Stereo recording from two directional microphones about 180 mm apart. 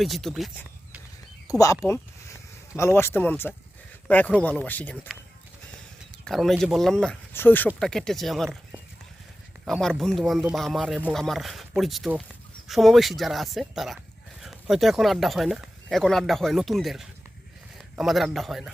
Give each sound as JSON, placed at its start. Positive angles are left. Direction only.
{"t": 0.0, "sound": "speech", "side_deg": 0}
{"t": 1.5, "sound": "speech", "side_deg": 20}
{"t": 6.2, "sound": "speech", "side_deg": 0}